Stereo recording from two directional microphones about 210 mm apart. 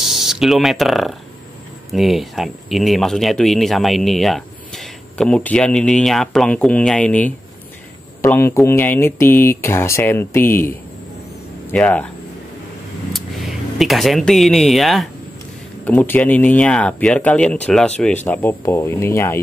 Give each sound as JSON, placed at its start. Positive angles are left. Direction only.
{"t": 0.0, "sound": "speech", "side_deg": 0}
{"t": 11.7, "sound": "speech", "side_deg": 5}
{"t": 13.1, "sound": "speech", "side_deg": 0}